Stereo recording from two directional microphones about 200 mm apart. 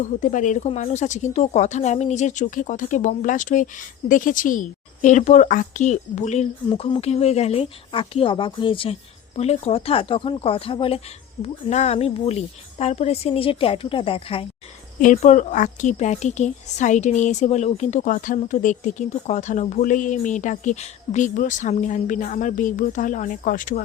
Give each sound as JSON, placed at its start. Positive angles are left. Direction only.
{"t": 0.0, "sound": "a woman's voice", "side_deg": 40}
{"t": 15.0, "sound": "a woman's voice", "side_deg": 40}